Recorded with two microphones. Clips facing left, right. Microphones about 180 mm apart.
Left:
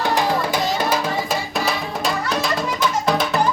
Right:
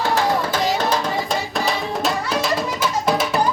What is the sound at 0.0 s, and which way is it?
Music, 15° left (ahead or behind).